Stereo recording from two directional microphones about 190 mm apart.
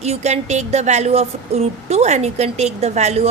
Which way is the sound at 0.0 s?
35° right (ahead or behind).